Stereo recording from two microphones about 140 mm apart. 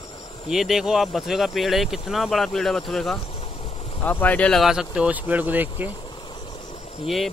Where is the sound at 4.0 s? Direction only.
15° left (ahead or behind); by 5.9 s 15° right (ahead or behind).